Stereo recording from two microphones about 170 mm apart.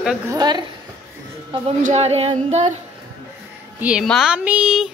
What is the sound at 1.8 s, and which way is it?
Speech, 45° right (ahead or behind).